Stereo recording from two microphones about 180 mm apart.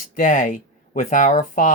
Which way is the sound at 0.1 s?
50° left (ahead or behind).